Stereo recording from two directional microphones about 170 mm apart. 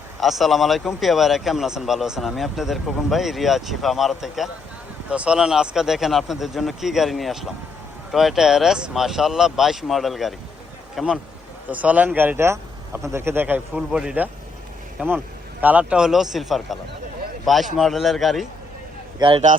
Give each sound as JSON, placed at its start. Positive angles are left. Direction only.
{"t": 0.2, "sound": "a man's voice", "side_deg": 0}
{"t": 19.2, "sound": "speech", "side_deg": -25}